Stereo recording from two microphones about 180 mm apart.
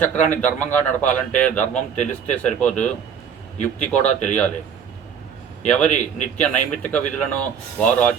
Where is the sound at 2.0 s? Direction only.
40° left (ahead or behind).